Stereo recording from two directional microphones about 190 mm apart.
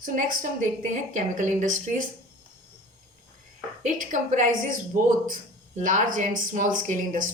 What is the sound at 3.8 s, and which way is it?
A woman's voice, 40° right (ahead or behind).